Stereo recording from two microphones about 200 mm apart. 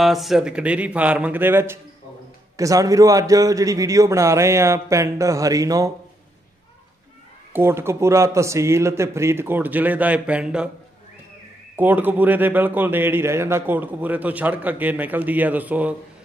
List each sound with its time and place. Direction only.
0.0 s a man's voice: centre (ahead or behind); by 5.9 s 15° right (ahead or behind)
7.5 s a man's voice: 10° right (ahead or behind)
11.7 s a man's voice: 10° right (ahead or behind)